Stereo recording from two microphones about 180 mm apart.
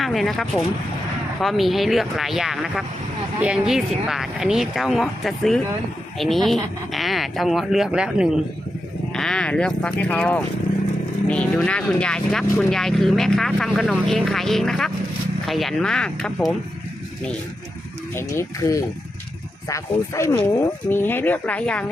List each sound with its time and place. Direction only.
0.0 s speech: centre (ahead or behind)
18.1 s speech: 15° left (ahead or behind)